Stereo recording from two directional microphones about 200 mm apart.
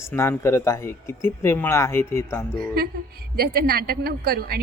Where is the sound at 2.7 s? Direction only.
50° right (ahead or behind).